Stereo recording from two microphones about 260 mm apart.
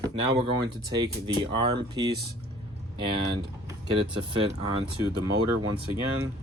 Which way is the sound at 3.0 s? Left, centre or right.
Centre.